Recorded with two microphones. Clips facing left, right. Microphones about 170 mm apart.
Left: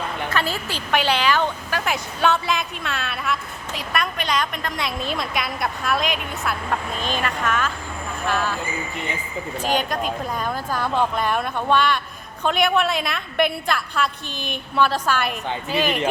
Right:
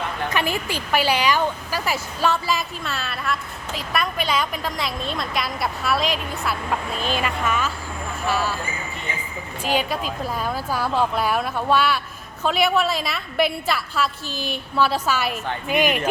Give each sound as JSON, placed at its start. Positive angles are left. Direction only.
{"t": 0.3, "sound": "a woman's voice", "side_deg": -15}
{"t": 9.6, "sound": "a woman's voice", "side_deg": -5}